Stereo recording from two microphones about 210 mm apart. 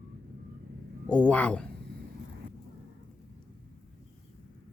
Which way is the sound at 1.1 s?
5° left (ahead or behind).